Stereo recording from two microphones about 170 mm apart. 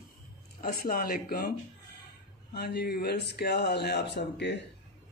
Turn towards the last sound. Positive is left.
turn(degrees=90)